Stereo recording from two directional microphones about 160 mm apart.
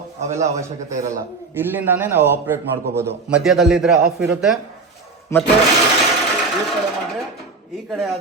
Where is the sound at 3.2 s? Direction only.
5° right (ahead or behind).